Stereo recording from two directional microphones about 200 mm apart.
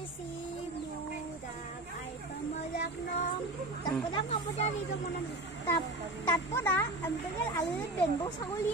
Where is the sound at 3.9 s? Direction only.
25° left (ahead or behind).